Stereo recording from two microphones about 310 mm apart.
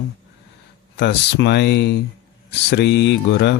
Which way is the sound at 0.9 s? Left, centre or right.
Left.